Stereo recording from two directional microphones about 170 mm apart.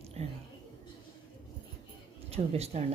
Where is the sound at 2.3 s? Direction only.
40° right (ahead or behind).